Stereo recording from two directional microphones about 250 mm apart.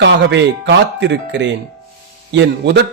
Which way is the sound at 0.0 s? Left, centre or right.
Right.